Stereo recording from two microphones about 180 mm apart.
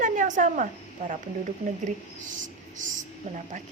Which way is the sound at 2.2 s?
45° right (ahead or behind).